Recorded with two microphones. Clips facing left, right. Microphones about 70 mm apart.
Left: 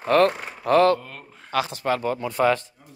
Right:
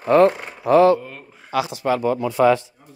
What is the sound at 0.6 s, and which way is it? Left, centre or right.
Speech, left.